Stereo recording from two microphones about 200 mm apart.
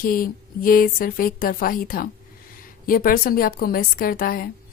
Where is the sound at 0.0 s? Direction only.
45° left (ahead or behind).